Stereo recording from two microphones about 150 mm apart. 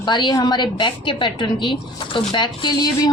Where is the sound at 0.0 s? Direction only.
30° left (ahead or behind).